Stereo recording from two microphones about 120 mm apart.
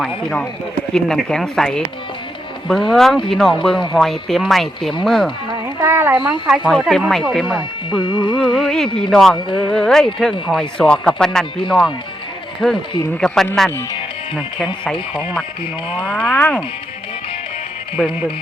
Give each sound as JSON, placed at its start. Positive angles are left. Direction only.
{"t": 0.9, "sound": "speech", "side_deg": 5}
{"t": 5.8, "sound": "a sound", "side_deg": -20}
{"t": 6.7, "sound": "speech", "side_deg": -5}
{"t": 8.0, "sound": "music", "side_deg": 40}
{"t": 8.4, "sound": "speech", "side_deg": 5}
{"t": 9.5, "sound": "music", "side_deg": 40}
{"t": 9.7, "sound": "speech", "side_deg": 5}
{"t": 15.1, "sound": "speech", "side_deg": 5}
{"t": 16.0, "sound": "a sound", "side_deg": 10}
{"t": 18.0, "sound": "speech", "side_deg": 0}